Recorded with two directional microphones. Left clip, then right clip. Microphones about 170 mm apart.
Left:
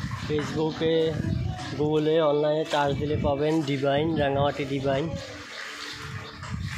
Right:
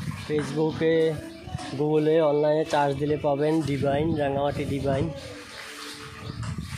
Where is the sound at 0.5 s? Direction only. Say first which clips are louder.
Right 2 dB; 30° right (ahead or behind).